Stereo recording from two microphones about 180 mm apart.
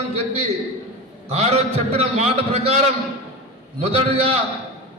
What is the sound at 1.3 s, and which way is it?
Speech, 35° right (ahead or behind).